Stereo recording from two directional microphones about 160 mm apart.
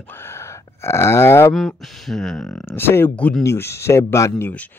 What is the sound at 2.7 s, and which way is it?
Speech, 15° left (ahead or behind).